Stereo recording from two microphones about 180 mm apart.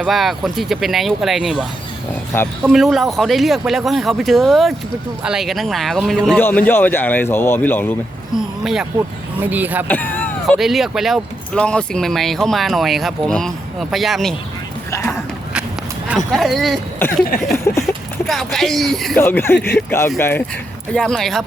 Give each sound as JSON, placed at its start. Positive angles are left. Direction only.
{"t": 0.0, "sound": "speech", "side_deg": 0}
{"t": 2.3, "sound": "speech", "side_deg": 10}
{"t": 2.6, "sound": "speech", "side_deg": 0}
{"t": 8.6, "sound": "speech", "side_deg": 0}
{"t": 9.9, "sound": "a sound", "side_deg": 10}
{"t": 10.6, "sound": "speech", "side_deg": 0}
{"t": 14.8, "sound": "speech", "side_deg": 15}
{"t": 16.0, "sound": "speech", "side_deg": 0}
{"t": 17.7, "sound": "speech", "side_deg": 15}
{"t": 18.3, "sound": "speech", "side_deg": 0}
{"t": 19.2, "sound": "speech", "side_deg": 15}